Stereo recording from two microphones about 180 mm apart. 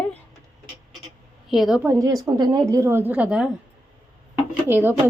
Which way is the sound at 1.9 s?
20° right (ahead or behind).